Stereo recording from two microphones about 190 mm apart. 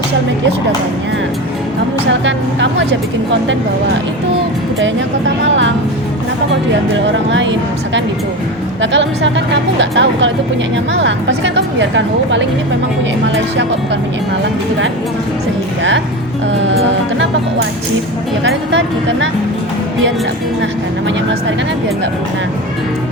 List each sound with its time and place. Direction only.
2.2 s speech: 75° right (ahead or behind)
6.9 s speech: 75° right (ahead or behind)
8.8 s speech: 75° right (ahead or behind)